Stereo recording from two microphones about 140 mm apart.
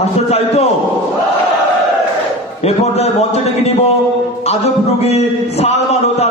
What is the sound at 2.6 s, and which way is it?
A man's voice, 50° left (ahead or behind).